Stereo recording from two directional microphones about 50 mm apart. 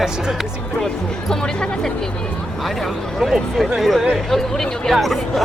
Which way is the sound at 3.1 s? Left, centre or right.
Centre.